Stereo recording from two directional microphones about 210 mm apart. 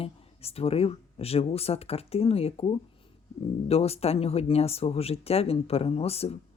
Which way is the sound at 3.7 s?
30° left (ahead or behind).